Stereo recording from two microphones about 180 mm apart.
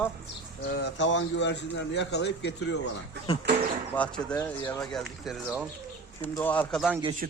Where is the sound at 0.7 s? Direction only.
70° left (ahead or behind).